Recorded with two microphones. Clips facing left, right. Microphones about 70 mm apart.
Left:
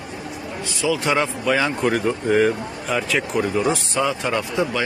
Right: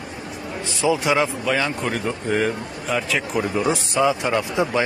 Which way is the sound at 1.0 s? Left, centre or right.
Centre.